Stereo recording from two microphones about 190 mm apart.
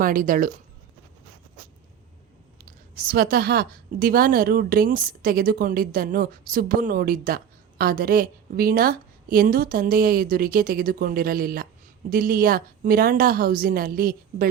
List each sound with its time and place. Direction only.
0.0 s a woman's voice: 45° right (ahead or behind)
2.9 s a woman's voice: 50° right (ahead or behind)